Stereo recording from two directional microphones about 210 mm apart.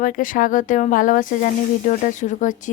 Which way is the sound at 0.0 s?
40° left (ahead or behind).